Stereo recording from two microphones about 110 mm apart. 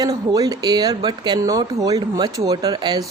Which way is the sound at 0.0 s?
35° right (ahead or behind).